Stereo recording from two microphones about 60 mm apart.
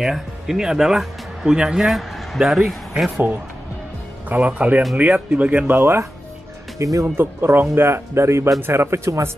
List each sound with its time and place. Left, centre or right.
0.0 s speech: centre
1.9 s speech: centre
4.3 s speech: right
5.8 s speech: right
6.8 s speech: right
7.2 s speech: right